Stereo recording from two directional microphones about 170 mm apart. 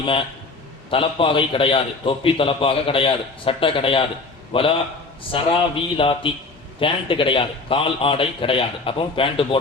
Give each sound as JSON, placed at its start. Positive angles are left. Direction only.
{"t": 0.0, "sound": "a man's voice", "side_deg": 30}